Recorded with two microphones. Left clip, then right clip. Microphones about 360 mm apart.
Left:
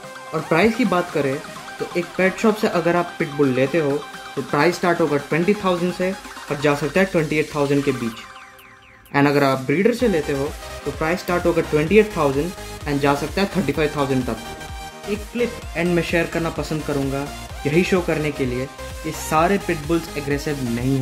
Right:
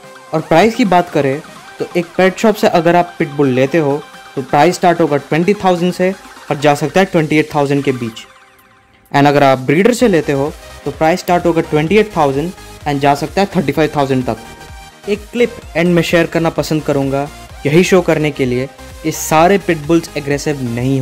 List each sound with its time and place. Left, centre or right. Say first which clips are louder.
0.3 s speech: right 8 dB; right
9.1 s speech: right 8 dB; right